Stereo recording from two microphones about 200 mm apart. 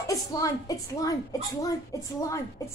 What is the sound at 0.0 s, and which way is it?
A woman's voice, 15° left (ahead or behind).